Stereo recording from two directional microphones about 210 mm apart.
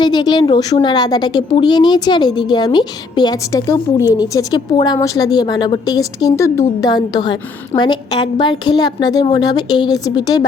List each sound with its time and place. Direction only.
0.0 s a woman's voice: 20° left (ahead or behind)